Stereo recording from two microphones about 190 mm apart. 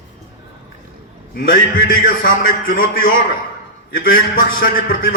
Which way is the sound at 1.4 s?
50° left (ahead or behind).